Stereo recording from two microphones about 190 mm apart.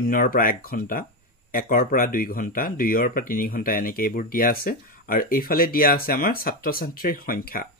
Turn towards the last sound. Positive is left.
turn(degrees=50)  # may be behind; listen again after turning